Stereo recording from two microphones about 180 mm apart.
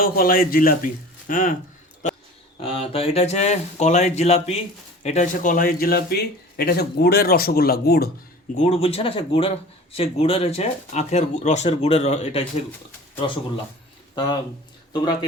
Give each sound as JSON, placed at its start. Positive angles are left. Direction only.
{"t": 0.0, "sound": "a man's voice", "side_deg": 55}
{"t": 2.6, "sound": "speech", "side_deg": 30}
{"t": 8.5, "sound": "speech", "side_deg": 35}